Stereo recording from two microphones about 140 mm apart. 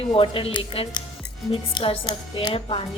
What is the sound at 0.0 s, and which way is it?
A woman's voice, 40° left (ahead or behind).